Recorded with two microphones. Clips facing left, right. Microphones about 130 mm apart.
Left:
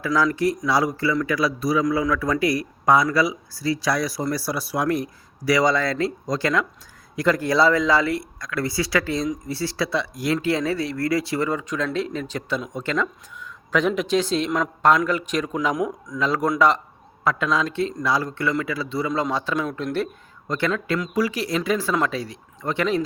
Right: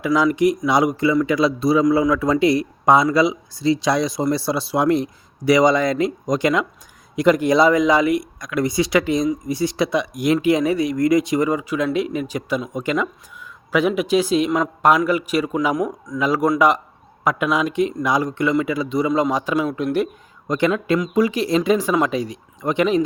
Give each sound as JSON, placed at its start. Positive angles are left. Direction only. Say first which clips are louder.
{"t": 0.0, "sound": "a man's voice", "louder": "right 4 dB", "side_deg": -15}